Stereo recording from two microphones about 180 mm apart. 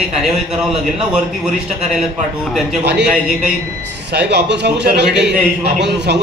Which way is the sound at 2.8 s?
70° right (ahead or behind).